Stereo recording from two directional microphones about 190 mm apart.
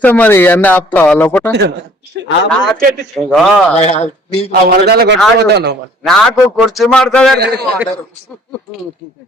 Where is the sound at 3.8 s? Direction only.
35° left (ahead or behind).